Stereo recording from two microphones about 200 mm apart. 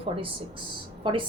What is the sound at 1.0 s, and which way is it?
Speech, 25° right (ahead or behind).